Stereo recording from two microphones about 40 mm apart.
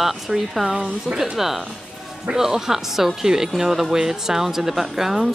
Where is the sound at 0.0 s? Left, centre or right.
Centre.